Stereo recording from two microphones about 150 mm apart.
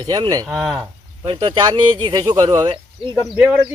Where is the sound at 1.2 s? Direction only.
35° right (ahead or behind).